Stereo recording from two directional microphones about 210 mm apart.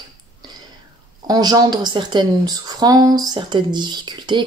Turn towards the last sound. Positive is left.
turn(degrees=-20)  # may be behind; listen again after turning